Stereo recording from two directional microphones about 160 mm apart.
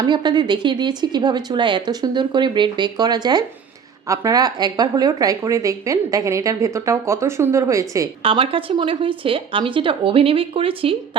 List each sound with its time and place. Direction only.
0.0 s speech: 25° right (ahead or behind)
8.2 s speech: 35° right (ahead or behind)